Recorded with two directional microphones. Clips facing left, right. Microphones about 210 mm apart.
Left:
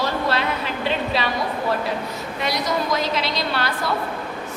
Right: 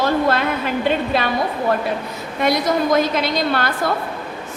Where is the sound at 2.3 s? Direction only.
50° right (ahead or behind).